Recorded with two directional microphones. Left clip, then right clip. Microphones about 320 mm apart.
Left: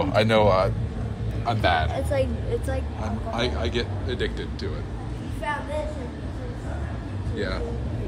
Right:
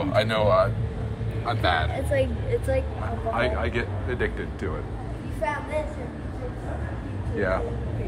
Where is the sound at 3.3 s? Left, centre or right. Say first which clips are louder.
Even; centre.